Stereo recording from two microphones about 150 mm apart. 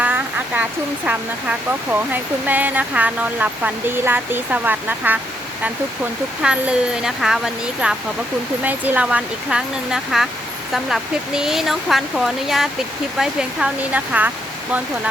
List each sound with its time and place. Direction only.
0.0 s speech: 10° right (ahead or behind)
6.4 s speech: 5° right (ahead or behind)